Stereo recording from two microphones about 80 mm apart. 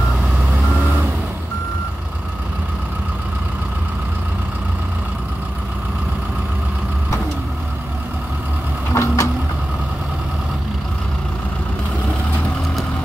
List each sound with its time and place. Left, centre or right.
8.9 s vehicle: left